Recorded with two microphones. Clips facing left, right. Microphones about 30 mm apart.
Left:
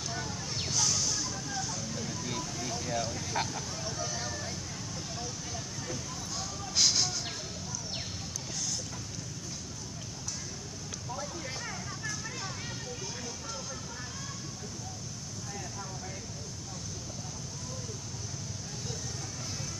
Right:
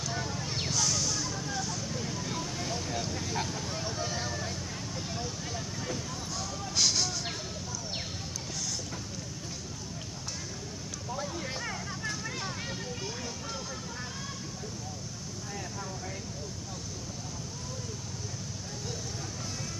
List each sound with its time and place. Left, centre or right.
0.1 s a sound: centre
0.7 s a sound: centre
2.9 s speech: centre
3.5 s vehicle: right
6.8 s speech: centre
11.6 s vehicle: right